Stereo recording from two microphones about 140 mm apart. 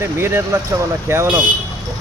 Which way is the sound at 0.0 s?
15° right (ahead or behind).